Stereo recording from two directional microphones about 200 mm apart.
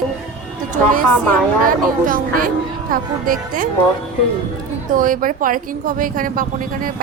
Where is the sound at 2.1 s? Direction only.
45° right (ahead or behind).